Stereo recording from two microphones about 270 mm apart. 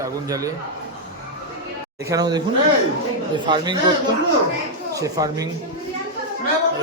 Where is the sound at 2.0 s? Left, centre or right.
Centre.